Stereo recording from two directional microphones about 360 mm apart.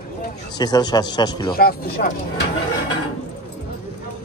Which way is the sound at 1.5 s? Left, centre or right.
Left.